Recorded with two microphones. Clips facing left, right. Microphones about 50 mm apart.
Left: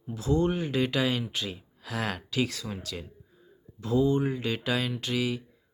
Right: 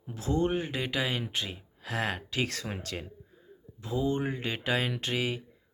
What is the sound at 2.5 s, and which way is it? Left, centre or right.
Speech, right.